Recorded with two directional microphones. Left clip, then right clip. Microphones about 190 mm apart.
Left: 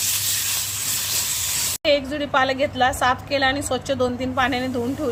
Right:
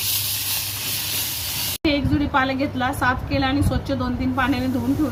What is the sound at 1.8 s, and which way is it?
A woman's voice, 60° left (ahead or behind).